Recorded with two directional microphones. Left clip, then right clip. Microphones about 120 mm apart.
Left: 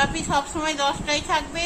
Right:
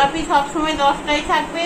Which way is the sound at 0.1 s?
40° left (ahead or behind).